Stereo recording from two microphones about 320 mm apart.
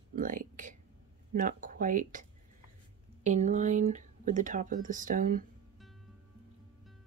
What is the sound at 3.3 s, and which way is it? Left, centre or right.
Speech, right.